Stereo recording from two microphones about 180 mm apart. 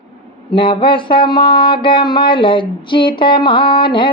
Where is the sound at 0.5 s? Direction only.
30° left (ahead or behind).